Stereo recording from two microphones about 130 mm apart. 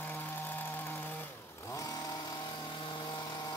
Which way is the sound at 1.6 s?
25° left (ahead or behind).